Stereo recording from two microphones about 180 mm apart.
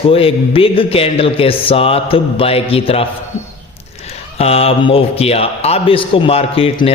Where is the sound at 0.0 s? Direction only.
30° left (ahead or behind).